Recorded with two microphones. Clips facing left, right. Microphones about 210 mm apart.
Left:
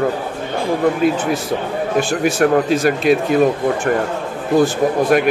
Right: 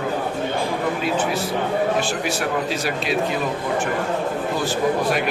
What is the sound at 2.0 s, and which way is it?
Speech, 50° left (ahead or behind).